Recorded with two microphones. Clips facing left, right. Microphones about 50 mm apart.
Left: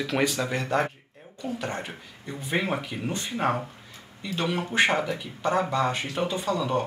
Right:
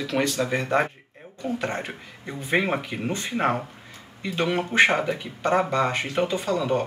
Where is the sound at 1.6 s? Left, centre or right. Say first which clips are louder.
Right 3 dB; right.